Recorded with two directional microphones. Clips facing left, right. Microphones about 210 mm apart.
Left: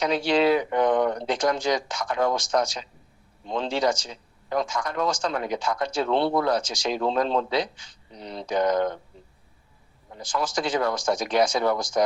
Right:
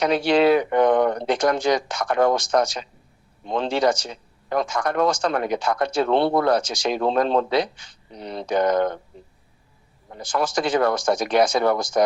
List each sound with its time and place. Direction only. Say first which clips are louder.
0.0 s speech: right 4 dB; 65° right (ahead or behind)
10.1 s speech: right 4 dB; 65° right (ahead or behind)